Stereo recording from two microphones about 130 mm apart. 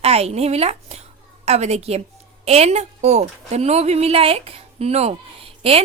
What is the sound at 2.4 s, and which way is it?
A woman's voice, 50° right (ahead or behind).